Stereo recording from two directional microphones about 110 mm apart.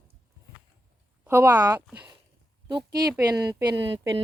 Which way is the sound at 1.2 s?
25° right (ahead or behind).